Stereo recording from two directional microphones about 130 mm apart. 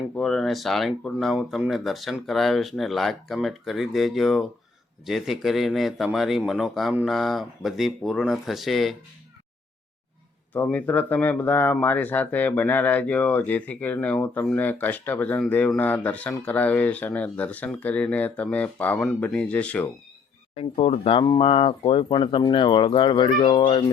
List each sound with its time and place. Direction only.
0.2 s speech: 5° left (ahead or behind)
10.5 s speech: 10° left (ahead or behind)
18.9 s speech: centre (ahead or behind)
20.6 s speech: 45° left (ahead or behind)